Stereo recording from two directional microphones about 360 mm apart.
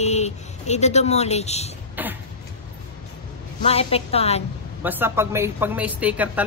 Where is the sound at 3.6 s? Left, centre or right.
Centre.